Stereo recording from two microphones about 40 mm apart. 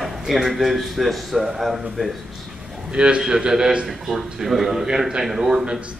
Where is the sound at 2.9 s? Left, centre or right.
Right.